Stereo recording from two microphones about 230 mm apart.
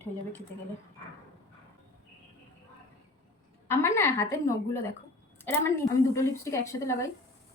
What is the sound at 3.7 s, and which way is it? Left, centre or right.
Speech, centre.